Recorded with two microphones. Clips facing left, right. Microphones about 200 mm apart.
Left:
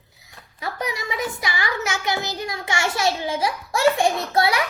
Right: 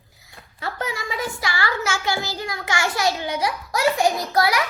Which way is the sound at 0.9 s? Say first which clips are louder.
Left 1 dB; 20° left (ahead or behind).